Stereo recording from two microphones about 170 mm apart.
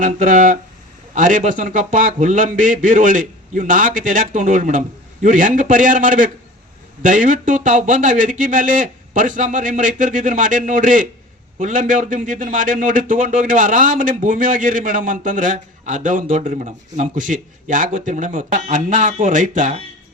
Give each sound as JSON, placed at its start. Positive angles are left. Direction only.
{"t": 0.0, "sound": "speech", "side_deg": -50}